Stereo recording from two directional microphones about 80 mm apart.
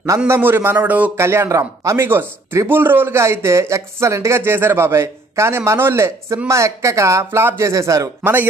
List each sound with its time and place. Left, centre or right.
0.3 s speech: right
1.1 s speech: right
8.2 s speech: right